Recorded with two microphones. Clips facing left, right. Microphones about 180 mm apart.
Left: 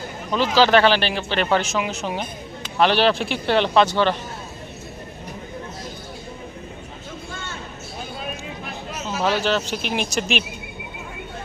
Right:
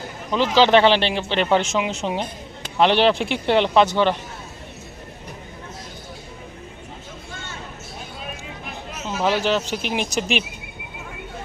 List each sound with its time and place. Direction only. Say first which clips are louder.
0.5 s speech: right 1 dB; 20° right (ahead or behind)
9.0 s speech: right 1 dB; 15° right (ahead or behind)